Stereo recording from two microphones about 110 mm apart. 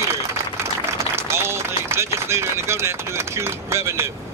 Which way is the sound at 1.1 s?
25° right (ahead or behind).